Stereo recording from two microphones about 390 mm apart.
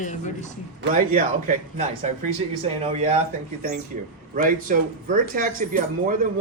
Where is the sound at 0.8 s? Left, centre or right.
Centre.